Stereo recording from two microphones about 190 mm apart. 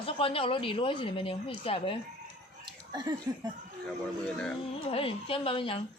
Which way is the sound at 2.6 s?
20° right (ahead or behind).